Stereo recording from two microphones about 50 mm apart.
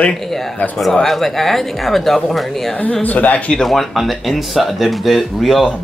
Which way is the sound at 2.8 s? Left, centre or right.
Left.